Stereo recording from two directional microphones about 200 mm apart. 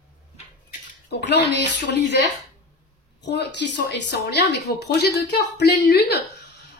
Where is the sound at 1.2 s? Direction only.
60° left (ahead or behind).